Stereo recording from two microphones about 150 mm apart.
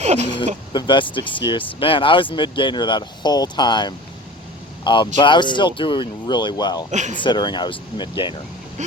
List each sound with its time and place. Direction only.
0.0 s speech: 50° right (ahead or behind)
0.7 s speech: 30° left (ahead or behind)
6.9 s speech: 55° right (ahead or behind)
7.2 s speech: 30° left (ahead or behind)
8.8 s speech: 55° right (ahead or behind)